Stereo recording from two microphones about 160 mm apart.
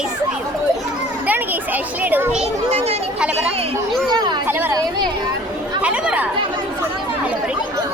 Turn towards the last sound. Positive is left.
turn(degrees=-10)  # may be behind; listen again after turning